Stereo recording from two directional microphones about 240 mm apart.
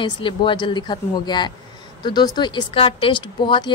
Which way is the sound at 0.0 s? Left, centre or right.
Centre.